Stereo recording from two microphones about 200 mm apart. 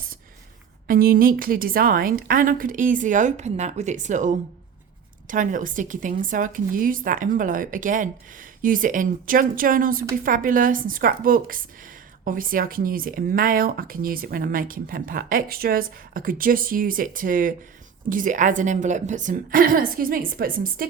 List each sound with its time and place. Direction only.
0.9 s speech: 45° right (ahead or behind)